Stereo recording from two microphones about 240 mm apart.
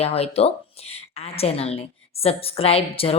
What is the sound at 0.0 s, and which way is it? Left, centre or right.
A woman's voice, left.